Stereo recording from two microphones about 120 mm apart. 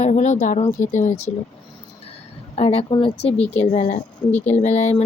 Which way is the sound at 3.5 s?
70° left (ahead or behind).